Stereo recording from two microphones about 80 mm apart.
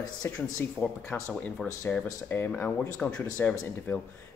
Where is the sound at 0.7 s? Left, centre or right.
Centre.